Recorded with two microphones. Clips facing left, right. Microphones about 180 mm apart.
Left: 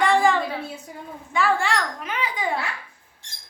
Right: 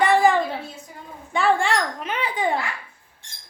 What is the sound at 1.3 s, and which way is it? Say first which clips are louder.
A child's voice: right 2 dB; 25° right (ahead or behind).